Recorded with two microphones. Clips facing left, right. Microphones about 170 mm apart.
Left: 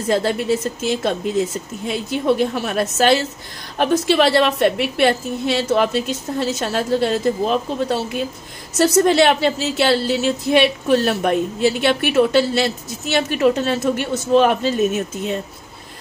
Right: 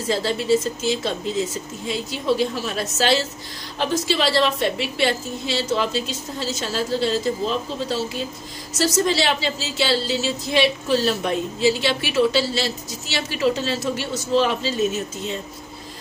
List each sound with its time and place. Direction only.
0.1 s a woman's voice: 55° left (ahead or behind)